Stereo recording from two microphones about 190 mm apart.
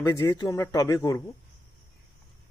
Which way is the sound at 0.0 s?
15° left (ahead or behind).